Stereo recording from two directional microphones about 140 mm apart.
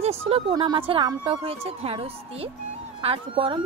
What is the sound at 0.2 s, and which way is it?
A woman's voice, 45° right (ahead or behind).